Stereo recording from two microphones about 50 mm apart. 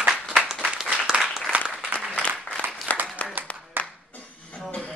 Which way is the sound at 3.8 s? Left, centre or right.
Right.